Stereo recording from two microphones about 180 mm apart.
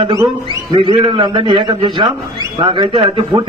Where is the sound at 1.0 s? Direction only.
25° right (ahead or behind).